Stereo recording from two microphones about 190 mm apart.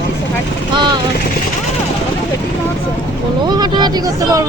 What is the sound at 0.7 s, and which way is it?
Vehicle, 25° right (ahead or behind).